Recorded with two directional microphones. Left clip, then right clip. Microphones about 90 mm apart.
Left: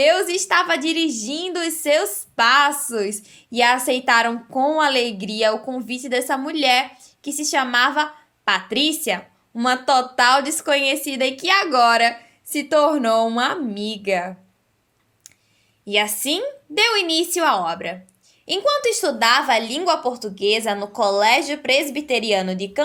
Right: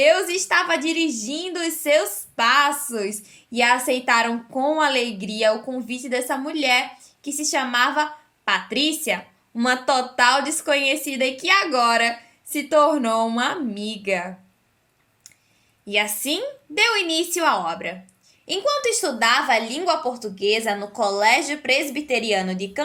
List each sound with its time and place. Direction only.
0.0 s a woman's voice: 30° left (ahead or behind)
15.9 s a woman's voice: 35° left (ahead or behind)